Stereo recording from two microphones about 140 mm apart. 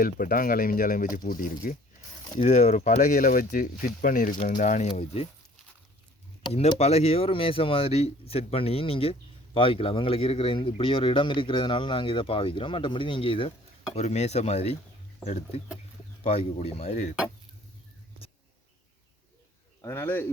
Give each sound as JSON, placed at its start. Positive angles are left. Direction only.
{"t": 0.0, "sound": "speech", "side_deg": 90}
{"t": 2.4, "sound": "speech", "side_deg": 50}
{"t": 6.7, "sound": "speech", "side_deg": 45}
{"t": 13.9, "sound": "speech", "side_deg": 50}
{"t": 19.8, "sound": "speech", "side_deg": 15}